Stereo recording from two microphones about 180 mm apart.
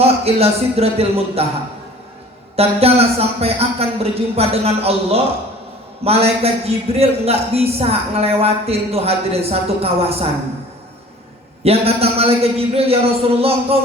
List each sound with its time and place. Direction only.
0.0 s speech: 35° right (ahead or behind)
2.6 s speech: 35° right (ahead or behind)
11.6 s speech: 35° right (ahead or behind)